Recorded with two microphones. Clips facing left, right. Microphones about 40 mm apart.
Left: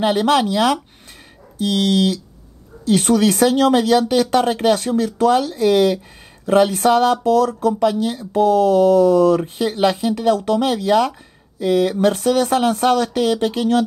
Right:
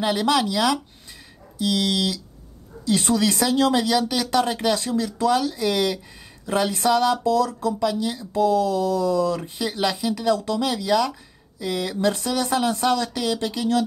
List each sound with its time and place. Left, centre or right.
0.0 s speech: left
2.9 s a sound: left
3.3 s speech: left
4.7 s speech: left
8.4 s a sound: left
9.4 s speech: left
12.7 s speech: left